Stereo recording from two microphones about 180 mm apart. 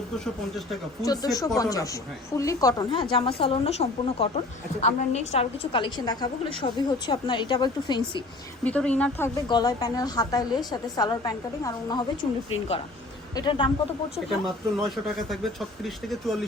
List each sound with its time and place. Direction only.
1.0 s a woman's voice: 20° left (ahead or behind)
8.6 s speech: 5° left (ahead or behind)
9.5 s a woman's voice: 25° left (ahead or behind)
13.3 s a woman's voice: 25° left (ahead or behind)
14.3 s speech: centre (ahead or behind)